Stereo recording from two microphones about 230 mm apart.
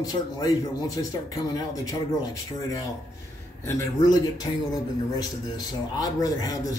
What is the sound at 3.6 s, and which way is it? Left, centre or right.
A man's voice, centre.